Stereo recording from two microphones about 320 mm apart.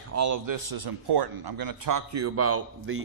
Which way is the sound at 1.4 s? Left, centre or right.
Right.